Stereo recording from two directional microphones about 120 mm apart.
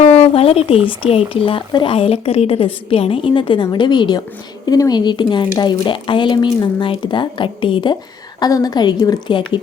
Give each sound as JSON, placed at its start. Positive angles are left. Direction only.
{"t": 0.0, "sound": "a woman's voice", "side_deg": 60}
{"t": 8.4, "sound": "a woman's voice", "side_deg": 30}